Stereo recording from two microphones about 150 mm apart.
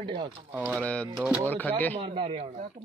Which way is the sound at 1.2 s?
10° right (ahead or behind).